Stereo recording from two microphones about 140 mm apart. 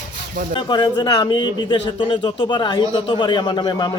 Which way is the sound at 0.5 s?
35° left (ahead or behind).